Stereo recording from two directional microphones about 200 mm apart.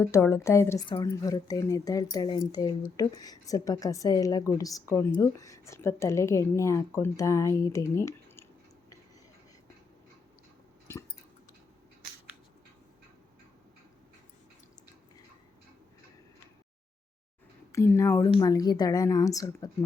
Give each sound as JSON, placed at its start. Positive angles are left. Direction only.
{"t": 0.0, "sound": "a woman's voice", "side_deg": 15}
{"t": 17.7, "sound": "a woman's voice", "side_deg": 15}